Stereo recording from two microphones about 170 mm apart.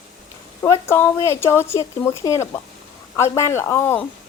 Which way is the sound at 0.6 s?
15° left (ahead or behind).